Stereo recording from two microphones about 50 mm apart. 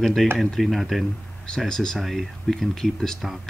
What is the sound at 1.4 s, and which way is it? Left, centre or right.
Speech, centre.